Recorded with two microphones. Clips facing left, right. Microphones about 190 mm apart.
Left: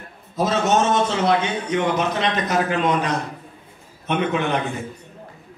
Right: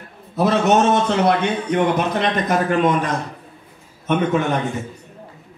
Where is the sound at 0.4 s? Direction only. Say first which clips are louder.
Right 3 dB; 65° right (ahead or behind); by 4.6 s 45° right (ahead or behind).